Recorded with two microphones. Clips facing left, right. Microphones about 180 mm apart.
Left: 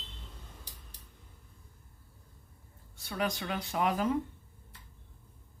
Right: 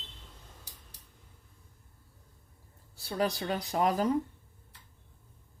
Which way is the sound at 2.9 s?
35° right (ahead or behind).